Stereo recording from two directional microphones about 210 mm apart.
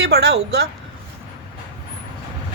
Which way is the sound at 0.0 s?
55° right (ahead or behind).